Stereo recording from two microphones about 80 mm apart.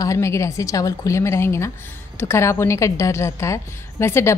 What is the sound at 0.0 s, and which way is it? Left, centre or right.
A woman's voice, left.